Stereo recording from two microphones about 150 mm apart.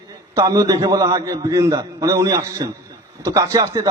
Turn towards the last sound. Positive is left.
turn(degrees=-20)  # may be behind; listen again after turning